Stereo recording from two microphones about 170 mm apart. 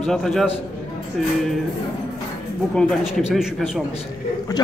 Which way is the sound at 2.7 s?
5° right (ahead or behind).